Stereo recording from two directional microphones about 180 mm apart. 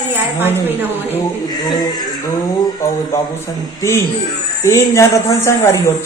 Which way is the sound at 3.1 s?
15° left (ahead or behind).